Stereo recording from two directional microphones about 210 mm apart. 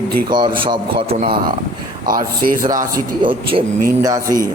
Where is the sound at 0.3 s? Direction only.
20° right (ahead or behind).